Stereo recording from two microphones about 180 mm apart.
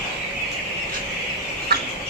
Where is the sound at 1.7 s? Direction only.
60° right (ahead or behind).